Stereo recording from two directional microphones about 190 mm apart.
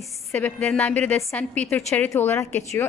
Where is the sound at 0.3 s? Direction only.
10° left (ahead or behind).